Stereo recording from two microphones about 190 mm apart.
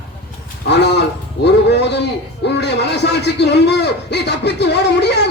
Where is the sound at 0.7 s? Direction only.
60° left (ahead or behind).